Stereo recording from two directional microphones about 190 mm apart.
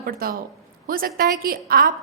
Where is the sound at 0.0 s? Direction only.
50° right (ahead or behind).